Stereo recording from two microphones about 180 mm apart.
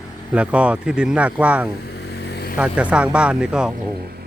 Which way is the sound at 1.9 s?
65° left (ahead or behind).